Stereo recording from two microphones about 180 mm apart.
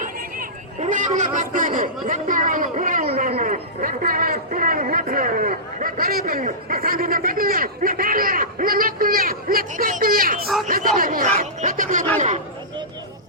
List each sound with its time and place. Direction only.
0.0 s speech: 45° right (ahead or behind)
10.4 s speech: centre (ahead or behind)
10.7 s a man's voice: 50° right (ahead or behind)